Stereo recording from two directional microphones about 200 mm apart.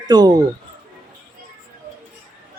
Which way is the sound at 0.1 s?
20° right (ahead or behind).